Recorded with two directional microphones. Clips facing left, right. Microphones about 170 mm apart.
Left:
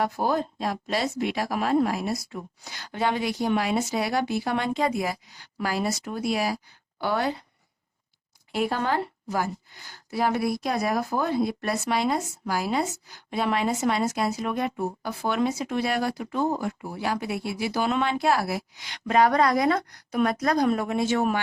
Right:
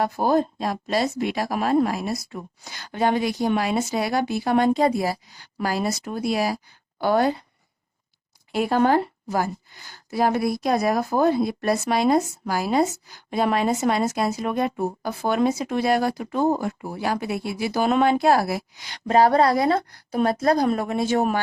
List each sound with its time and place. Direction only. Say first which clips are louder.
0.0 s speech: right 4 dB; 40° right (ahead or behind)
8.5 s speech: right 6 dB; 40° right (ahead or behind)